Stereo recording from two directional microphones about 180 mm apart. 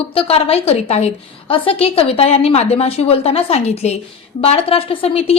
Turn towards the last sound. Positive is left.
turn(degrees=35)  # may be behind; listen again after turning